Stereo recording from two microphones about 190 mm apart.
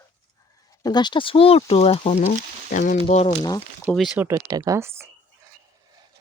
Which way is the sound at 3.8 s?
Centre (ahead or behind).